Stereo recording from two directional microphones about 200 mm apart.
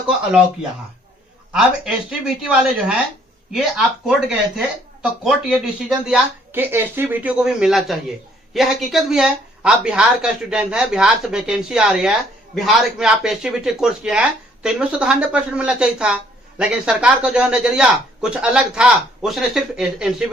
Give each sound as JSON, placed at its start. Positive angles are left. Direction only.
{"t": 1.5, "sound": "speech", "side_deg": 0}
{"t": 6.1, "sound": "speech", "side_deg": -10}